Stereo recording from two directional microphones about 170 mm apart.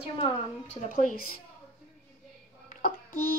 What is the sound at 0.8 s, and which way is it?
Speech, 55° left (ahead or behind).